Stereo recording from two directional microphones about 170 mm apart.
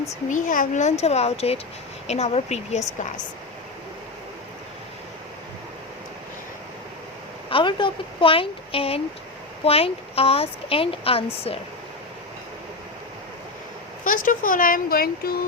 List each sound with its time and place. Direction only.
0.3 s a child's voice: 50° left (ahead or behind)
7.5 s speech: 30° left (ahead or behind)
14.0 s speech: 55° left (ahead or behind)